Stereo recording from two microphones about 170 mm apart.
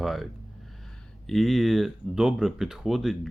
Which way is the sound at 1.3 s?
Centre (ahead or behind).